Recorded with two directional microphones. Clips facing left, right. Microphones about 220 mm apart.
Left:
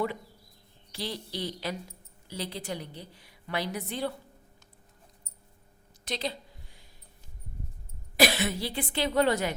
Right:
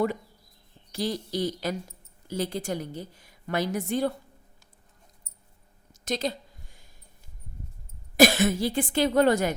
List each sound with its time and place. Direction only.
0.9 s a woman's voice: 45° right (ahead or behind)
5.9 s a sound: 45° right (ahead or behind)
8.1 s a woman's voice: 45° right (ahead or behind)